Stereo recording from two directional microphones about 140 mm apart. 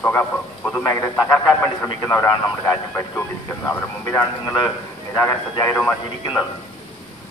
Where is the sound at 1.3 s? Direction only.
15° left (ahead or behind).